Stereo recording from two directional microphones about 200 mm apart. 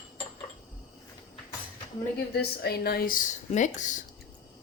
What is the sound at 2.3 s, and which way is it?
Speech, 50° left (ahead or behind).